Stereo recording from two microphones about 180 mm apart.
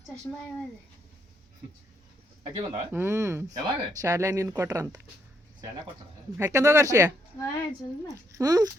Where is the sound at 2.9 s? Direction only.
15° right (ahead or behind).